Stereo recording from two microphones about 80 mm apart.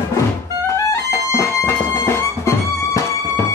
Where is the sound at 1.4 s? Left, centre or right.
Left.